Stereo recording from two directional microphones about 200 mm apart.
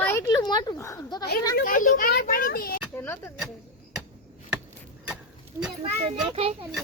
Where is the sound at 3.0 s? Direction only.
10° left (ahead or behind).